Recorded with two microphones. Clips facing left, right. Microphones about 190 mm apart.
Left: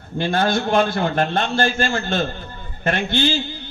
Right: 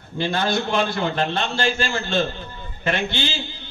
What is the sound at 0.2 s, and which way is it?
A man's voice, 50° left (ahead or behind).